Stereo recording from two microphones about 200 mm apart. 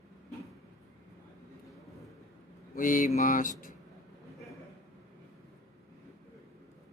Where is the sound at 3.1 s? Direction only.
40° left (ahead or behind).